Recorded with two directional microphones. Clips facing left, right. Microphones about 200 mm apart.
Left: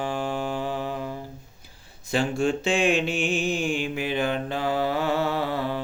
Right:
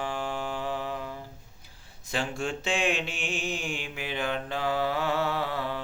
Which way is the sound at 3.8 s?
40° left (ahead or behind).